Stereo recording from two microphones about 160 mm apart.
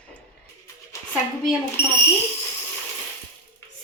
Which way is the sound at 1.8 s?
90° left.